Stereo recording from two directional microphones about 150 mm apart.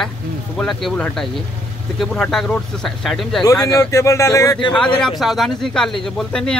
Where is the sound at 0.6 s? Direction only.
Centre (ahead or behind).